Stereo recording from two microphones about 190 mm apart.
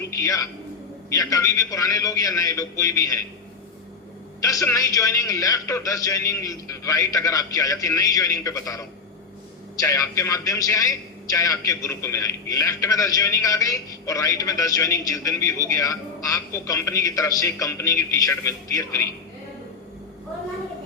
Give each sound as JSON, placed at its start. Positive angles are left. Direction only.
{"t": 0.2, "sound": "a man's voice", "side_deg": 15}
{"t": 4.4, "sound": "a man's voice", "side_deg": 15}